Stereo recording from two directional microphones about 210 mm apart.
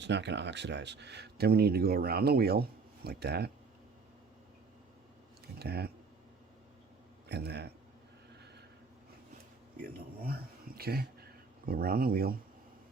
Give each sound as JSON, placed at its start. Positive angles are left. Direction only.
{"t": 0.0, "sound": "speech", "side_deg": -55}
{"t": 5.5, "sound": "speech", "side_deg": -50}
{"t": 7.3, "sound": "a man's voice", "side_deg": -50}
{"t": 10.2, "sound": "speech", "side_deg": -45}